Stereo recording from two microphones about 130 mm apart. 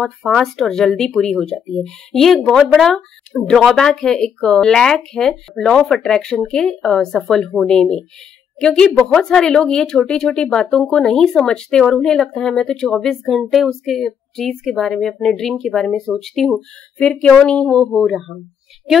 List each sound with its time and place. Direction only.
0.0 s speech: 5° left (ahead or behind)